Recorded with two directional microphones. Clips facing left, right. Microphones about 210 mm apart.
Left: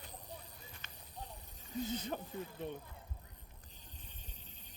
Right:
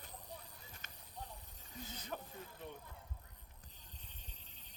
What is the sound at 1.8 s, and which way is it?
Speech, 25° left (ahead or behind).